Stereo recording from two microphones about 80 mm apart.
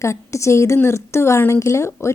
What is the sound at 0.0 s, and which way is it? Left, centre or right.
Speech, left.